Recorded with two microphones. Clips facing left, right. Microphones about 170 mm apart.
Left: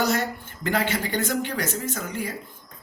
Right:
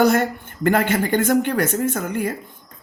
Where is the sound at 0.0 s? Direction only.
55° right (ahead or behind).